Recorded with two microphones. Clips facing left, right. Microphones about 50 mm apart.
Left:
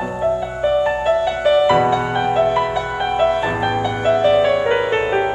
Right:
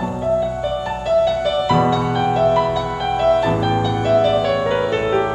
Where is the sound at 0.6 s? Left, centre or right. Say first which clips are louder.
Left 5 dB; left.